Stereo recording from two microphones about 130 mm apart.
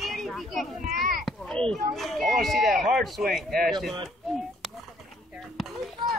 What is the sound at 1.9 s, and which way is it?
Speech, centre (ahead or behind).